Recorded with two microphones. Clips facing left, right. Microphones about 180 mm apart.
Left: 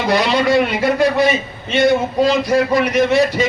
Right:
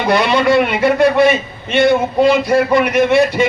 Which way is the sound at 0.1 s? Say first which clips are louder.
Right 2 dB; 60° right (ahead or behind).